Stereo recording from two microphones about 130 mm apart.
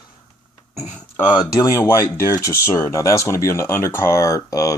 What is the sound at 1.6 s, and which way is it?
Speech, 20° left (ahead or behind).